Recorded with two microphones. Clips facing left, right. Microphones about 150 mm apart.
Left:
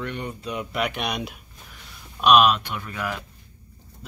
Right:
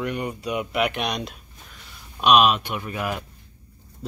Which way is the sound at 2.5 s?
20° right (ahead or behind).